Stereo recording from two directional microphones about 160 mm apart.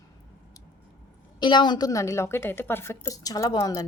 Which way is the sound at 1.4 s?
30° left (ahead or behind).